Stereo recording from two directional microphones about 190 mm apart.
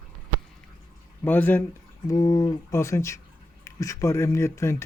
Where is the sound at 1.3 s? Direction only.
10° left (ahead or behind).